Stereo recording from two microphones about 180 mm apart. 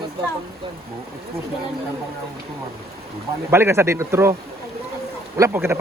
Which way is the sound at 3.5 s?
15° right (ahead or behind).